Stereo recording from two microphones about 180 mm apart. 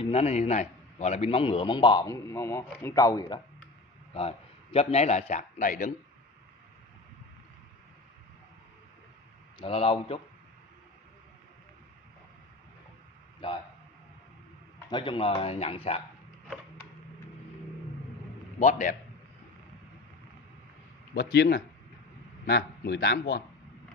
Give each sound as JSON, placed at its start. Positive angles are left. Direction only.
{"t": 0.0, "sound": "a man's voice", "side_deg": 35}
{"t": 4.1, "sound": "a man's voice", "side_deg": 30}
{"t": 9.6, "sound": "speech", "side_deg": 30}
{"t": 14.9, "sound": "speech", "side_deg": 25}
{"t": 18.6, "sound": "a man's voice", "side_deg": 45}
{"t": 21.1, "sound": "speech", "side_deg": 70}